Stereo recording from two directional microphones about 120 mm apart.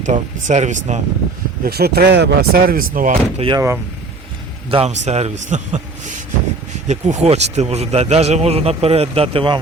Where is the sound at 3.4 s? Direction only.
55° right (ahead or behind).